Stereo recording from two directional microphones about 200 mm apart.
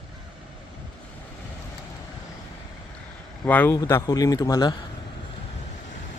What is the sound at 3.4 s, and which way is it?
Speech, 10° left (ahead or behind).